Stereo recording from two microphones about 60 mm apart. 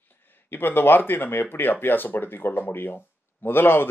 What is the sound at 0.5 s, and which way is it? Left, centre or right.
Speech, left.